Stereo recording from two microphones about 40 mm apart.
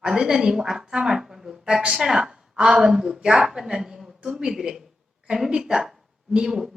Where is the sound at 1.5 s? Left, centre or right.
Centre.